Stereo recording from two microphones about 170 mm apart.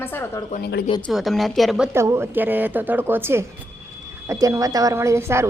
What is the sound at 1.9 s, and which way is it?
A woman's voice, 15° right (ahead or behind).